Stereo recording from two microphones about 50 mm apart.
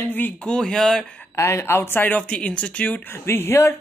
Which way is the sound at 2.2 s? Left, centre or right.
Left.